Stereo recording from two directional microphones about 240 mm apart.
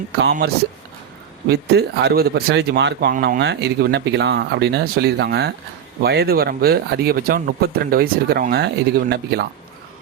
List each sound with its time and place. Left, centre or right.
0.2 s speech: right